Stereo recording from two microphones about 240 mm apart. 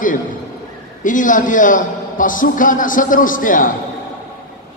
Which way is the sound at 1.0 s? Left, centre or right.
Left.